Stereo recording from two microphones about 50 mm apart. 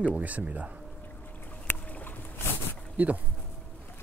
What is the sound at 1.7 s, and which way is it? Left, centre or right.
Boat, left.